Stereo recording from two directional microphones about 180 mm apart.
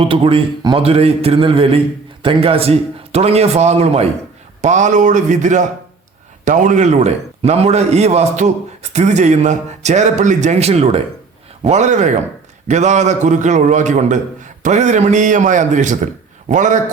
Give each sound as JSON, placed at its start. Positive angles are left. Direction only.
{"t": 0.1, "sound": "a man's voice", "side_deg": -30}